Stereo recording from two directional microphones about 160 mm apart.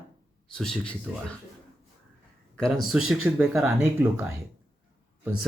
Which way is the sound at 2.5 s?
5° left (ahead or behind).